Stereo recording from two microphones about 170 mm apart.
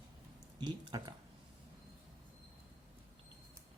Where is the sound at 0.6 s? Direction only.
25° right (ahead or behind).